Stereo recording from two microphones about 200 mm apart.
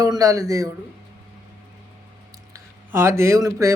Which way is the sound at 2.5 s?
15° right (ahead or behind).